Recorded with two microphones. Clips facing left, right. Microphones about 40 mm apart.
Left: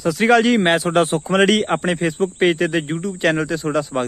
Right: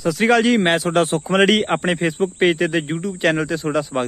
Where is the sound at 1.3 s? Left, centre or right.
Centre.